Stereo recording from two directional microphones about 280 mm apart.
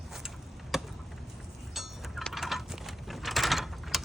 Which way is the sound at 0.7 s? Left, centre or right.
Centre.